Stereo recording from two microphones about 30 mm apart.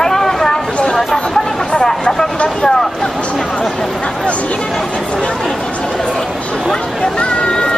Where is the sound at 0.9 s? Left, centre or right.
Centre.